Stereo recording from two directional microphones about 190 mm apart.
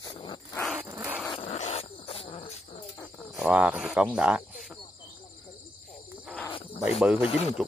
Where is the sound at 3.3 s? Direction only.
5° right (ahead or behind).